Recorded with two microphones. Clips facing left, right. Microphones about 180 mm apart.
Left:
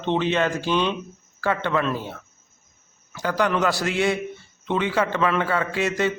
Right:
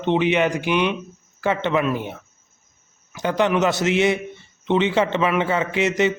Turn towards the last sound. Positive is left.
turn(degrees=-20)  # may be behind; listen again after turning